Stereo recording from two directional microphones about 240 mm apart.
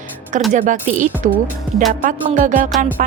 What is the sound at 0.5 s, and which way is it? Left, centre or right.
Speech, right.